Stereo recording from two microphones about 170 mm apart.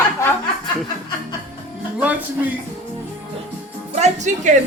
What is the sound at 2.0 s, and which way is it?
Speech, 10° right (ahead or behind).